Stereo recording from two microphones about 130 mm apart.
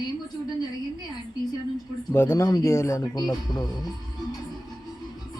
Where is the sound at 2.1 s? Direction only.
20° left (ahead or behind).